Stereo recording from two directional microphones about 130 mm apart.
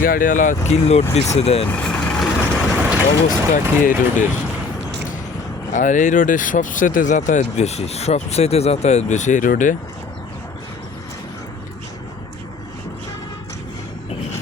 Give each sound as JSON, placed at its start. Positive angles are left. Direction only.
{"t": 0.0, "sound": "speech", "side_deg": 90}
{"t": 0.7, "sound": "speech", "side_deg": 55}
{"t": 1.7, "sound": "vehicle", "side_deg": 10}
{"t": 3.2, "sound": "speech", "side_deg": 85}
{"t": 5.7, "sound": "speech", "side_deg": 70}